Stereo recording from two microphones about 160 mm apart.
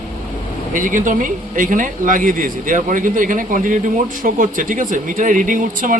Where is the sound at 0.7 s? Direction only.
55° right (ahead or behind).